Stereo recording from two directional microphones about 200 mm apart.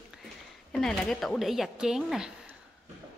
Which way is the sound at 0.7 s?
Centre (ahead or behind).